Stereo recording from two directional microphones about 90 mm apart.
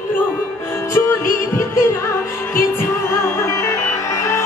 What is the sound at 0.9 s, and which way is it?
Music, 30° left (ahead or behind).